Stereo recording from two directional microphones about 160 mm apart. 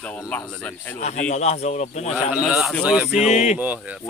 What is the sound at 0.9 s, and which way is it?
Speech, 55° left (ahead or behind).